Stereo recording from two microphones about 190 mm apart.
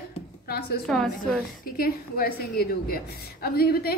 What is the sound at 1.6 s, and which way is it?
A woman's voice, 50° left (ahead or behind).